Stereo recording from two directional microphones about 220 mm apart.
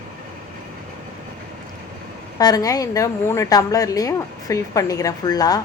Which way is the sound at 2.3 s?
15° left (ahead or behind).